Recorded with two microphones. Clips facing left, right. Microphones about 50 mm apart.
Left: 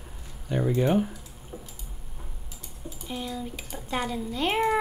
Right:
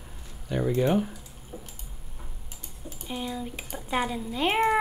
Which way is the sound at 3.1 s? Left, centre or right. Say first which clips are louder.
Right 1 dB; centre.